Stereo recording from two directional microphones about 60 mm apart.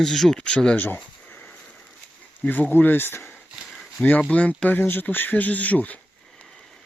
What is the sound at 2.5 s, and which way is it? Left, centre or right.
Speech, left.